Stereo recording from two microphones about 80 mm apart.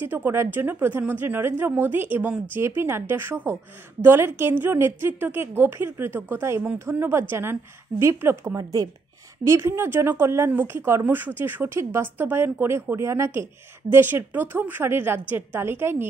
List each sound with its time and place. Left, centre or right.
0.0 s speech: right